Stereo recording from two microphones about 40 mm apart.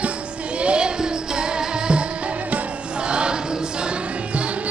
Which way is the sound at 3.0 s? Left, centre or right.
Right.